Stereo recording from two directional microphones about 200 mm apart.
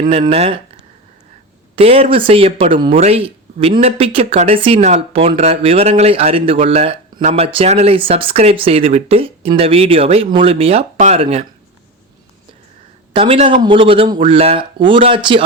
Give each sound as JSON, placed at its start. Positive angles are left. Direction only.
{"t": 0.0, "sound": "speech", "side_deg": -25}
{"t": 1.7, "sound": "speech", "side_deg": -30}
{"t": 13.1, "sound": "speech", "side_deg": -25}